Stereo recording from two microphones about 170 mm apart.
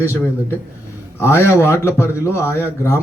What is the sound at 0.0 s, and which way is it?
Speech, 15° left (ahead or behind).